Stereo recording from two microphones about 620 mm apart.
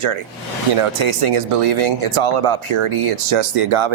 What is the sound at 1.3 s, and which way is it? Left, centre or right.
Speech, right.